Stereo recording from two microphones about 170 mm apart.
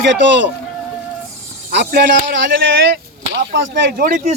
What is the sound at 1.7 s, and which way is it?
Speech, 80° right.